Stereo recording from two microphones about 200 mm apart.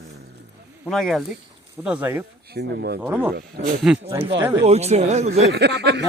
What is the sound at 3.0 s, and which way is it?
Speech, 10° right (ahead or behind).